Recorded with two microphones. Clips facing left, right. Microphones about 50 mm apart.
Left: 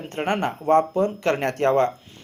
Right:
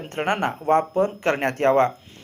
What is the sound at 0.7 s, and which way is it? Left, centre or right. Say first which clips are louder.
A man's voice: left 1 dB; right.